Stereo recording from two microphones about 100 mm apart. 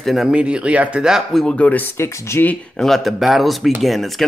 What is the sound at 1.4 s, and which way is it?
Speech, 10° left (ahead or behind).